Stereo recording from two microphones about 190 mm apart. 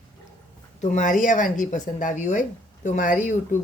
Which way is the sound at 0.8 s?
40° left (ahead or behind).